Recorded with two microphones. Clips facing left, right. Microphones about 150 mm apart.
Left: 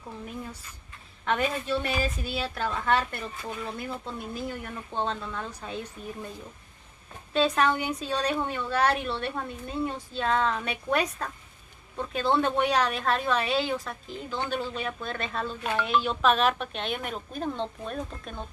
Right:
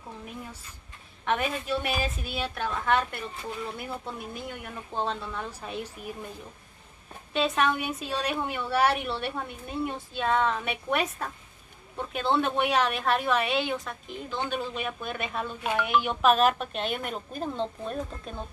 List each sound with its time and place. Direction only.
1.2 s speech: 5° right (ahead or behind)
7.3 s speech: centre (ahead or behind)